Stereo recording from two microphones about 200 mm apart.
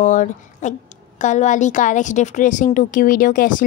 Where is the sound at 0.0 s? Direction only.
40° left (ahead or behind).